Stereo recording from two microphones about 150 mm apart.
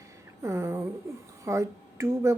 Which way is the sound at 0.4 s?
20° right (ahead or behind).